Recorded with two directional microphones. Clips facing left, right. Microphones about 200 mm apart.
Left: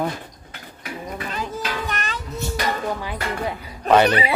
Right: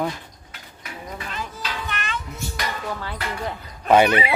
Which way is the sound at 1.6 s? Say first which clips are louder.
Left 4 dB; 40° left (ahead or behind).